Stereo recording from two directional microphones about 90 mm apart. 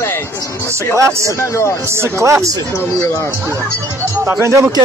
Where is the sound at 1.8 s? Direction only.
30° right (ahead or behind).